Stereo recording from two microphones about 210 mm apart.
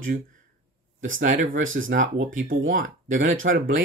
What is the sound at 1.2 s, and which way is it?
Speech, 40° right (ahead or behind).